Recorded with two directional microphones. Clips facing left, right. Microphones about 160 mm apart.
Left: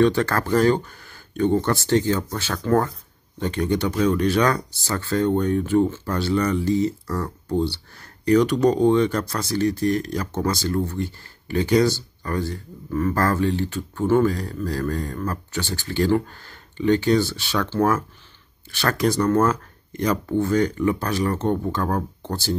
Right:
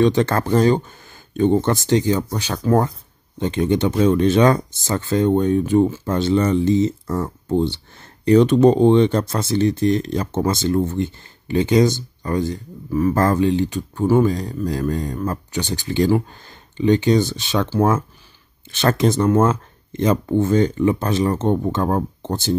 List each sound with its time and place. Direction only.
0.0 s speech: 20° right (ahead or behind)